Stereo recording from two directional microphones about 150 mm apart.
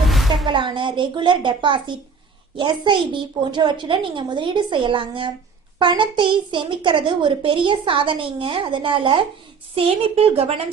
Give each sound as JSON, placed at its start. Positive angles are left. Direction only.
{"t": 0.1, "sound": "music", "side_deg": 0}
{"t": 0.4, "sound": "a woman's voice", "side_deg": -30}